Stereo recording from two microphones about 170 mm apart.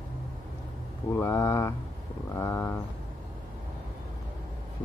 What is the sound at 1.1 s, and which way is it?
Speech, 20° left (ahead or behind).